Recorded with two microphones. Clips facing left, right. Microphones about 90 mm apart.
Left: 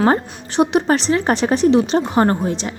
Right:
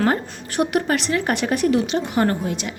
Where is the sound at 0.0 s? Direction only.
25° left (ahead or behind).